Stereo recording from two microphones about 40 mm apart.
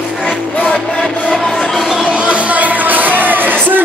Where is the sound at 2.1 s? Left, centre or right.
Right.